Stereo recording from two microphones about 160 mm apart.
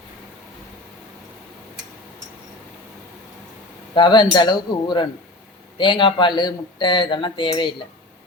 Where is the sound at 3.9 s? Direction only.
30° left (ahead or behind).